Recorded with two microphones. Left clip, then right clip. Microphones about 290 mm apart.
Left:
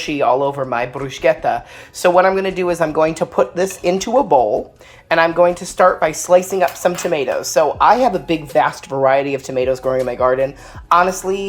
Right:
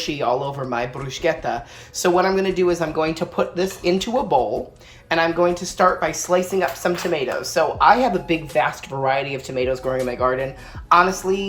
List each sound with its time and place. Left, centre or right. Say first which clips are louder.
0.0 s speech: left 6 dB; centre